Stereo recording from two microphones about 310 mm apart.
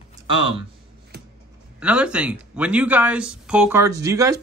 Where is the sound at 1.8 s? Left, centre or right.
Centre.